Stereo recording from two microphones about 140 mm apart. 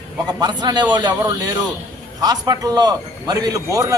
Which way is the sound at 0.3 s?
30° right (ahead or behind).